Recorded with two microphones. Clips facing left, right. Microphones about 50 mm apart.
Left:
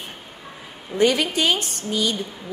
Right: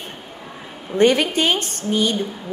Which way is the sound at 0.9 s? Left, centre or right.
Right.